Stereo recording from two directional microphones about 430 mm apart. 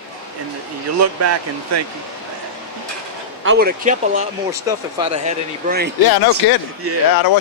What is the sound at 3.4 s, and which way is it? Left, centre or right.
Speech, right.